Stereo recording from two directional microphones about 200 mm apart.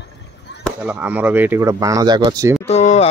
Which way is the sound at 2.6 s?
35° left (ahead or behind).